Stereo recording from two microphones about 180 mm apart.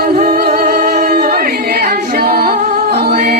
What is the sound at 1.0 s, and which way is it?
Singing, 60° right (ahead or behind).